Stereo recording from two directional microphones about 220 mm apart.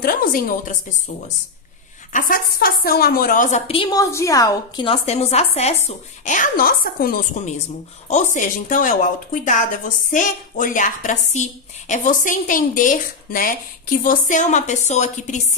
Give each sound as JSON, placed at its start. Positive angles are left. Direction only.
{"t": 0.0, "sound": "a woman's voice", "side_deg": 40}
{"t": 2.1, "sound": "a woman's voice", "side_deg": 40}